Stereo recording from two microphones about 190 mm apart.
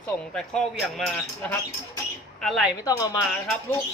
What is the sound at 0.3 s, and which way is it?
A woman's voice, 5° left (ahead or behind).